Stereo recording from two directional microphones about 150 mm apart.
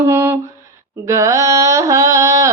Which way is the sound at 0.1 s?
15° right (ahead or behind).